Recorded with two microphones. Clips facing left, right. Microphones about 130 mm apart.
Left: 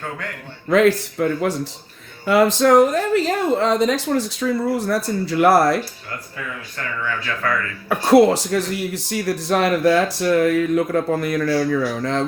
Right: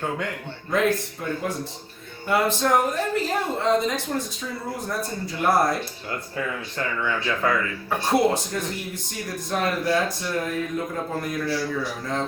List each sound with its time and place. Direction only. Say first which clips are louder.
0.7 s speech: left 7 dB; 90° left
7.0 s speech: even; 20° right (ahead or behind)
7.9 s speech: left 8 dB; 85° left